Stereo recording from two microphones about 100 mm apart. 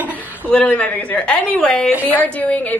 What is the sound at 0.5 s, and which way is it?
A woman's voice, 15° left (ahead or behind).